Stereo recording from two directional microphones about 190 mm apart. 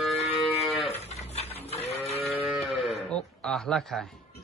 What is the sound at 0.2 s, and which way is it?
Moo, 30° left (ahead or behind).